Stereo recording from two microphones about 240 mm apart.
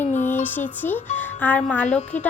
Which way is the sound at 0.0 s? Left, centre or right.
Left.